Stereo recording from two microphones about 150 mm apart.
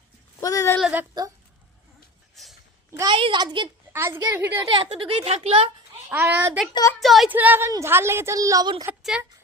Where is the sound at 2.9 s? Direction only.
20° right (ahead or behind).